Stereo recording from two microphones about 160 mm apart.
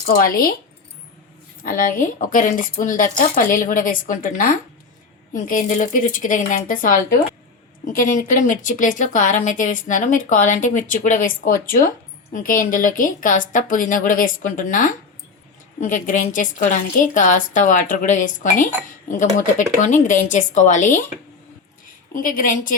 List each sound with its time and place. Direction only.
0.0 s a woman's voice: 65° left (ahead or behind)
1.6 s a woman's voice: 60° left (ahead or behind)
22.1 s a woman's voice: 60° left (ahead or behind)